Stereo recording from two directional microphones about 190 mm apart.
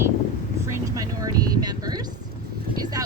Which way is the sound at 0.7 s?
20° right (ahead or behind).